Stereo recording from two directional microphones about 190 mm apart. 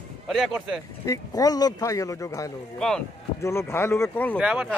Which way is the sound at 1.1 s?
20° left (ahead or behind).